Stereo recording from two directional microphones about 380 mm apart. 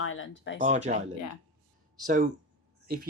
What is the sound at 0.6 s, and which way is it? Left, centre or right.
Speech, centre.